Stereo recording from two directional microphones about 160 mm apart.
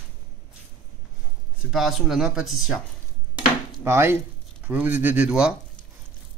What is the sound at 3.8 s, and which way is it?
Speech, 15° right (ahead or behind).